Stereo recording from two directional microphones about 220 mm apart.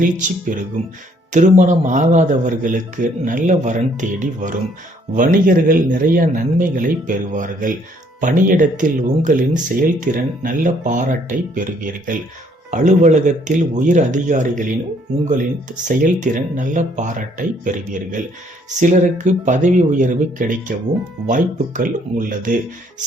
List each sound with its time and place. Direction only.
0.0 s a man's voice: 35° right (ahead or behind)